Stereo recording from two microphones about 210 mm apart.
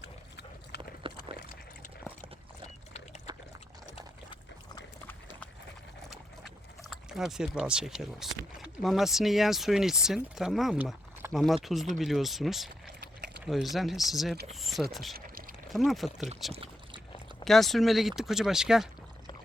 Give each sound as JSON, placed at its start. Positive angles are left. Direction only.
{"t": 0.0, "sound": "a sound", "side_deg": 55}
{"t": 1.0, "sound": "a sound", "side_deg": -25}
{"t": 6.9, "sound": "speech", "side_deg": 0}
{"t": 15.1, "sound": "pour", "side_deg": -45}
{"t": 15.7, "sound": "speech", "side_deg": 0}
{"t": 16.5, "sound": "boat", "side_deg": -25}
{"t": 17.4, "sound": "speech", "side_deg": 0}